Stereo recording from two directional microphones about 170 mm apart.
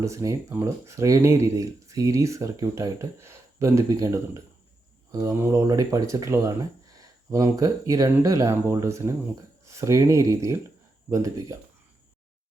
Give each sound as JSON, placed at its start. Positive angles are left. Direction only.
{"t": 0.0, "sound": "speech", "side_deg": -20}